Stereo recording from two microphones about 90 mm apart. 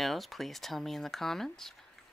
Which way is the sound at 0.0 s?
Centre (ahead or behind).